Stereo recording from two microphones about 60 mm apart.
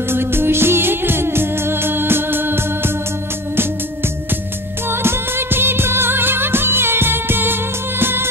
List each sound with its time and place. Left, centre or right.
0.1 s music: right
4.8 s music: right